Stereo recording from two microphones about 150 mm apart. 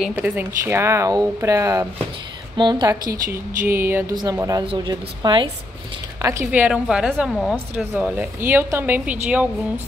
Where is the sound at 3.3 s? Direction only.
15° right (ahead or behind).